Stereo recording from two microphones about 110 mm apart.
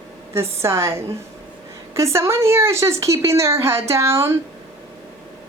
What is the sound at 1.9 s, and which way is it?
A woman's voice, 25° right (ahead or behind).